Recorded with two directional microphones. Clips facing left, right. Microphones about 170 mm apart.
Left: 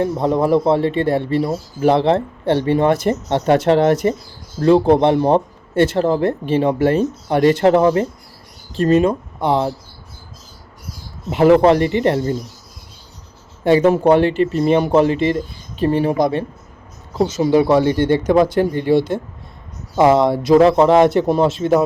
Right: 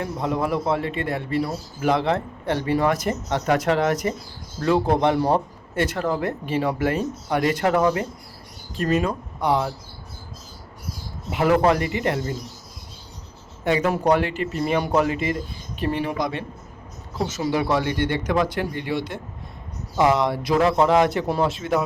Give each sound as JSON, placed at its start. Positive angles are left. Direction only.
{"t": 0.0, "sound": "speech", "side_deg": 30}
{"t": 11.3, "sound": "speech", "side_deg": 30}
{"t": 13.7, "sound": "speech", "side_deg": 30}